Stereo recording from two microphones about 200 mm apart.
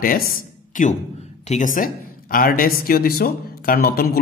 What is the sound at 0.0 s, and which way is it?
Speech, 45° left (ahead or behind).